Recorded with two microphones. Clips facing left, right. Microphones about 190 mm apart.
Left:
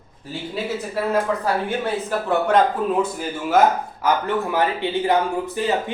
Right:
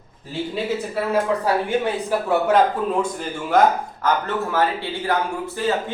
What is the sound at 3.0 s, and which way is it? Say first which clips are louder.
A man's voice: left 1 dB; 5° left (ahead or behind).